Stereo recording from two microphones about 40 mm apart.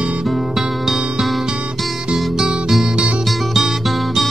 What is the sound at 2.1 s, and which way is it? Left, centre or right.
Music, centre.